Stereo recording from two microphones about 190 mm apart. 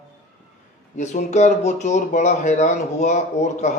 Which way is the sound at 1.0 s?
40° left (ahead or behind).